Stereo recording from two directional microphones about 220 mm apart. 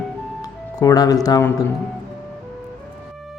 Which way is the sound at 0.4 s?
15° left (ahead or behind).